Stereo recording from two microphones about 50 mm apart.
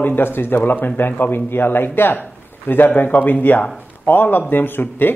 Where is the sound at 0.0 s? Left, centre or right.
Left.